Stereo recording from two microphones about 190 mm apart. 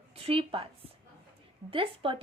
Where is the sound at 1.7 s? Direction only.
25° right (ahead or behind).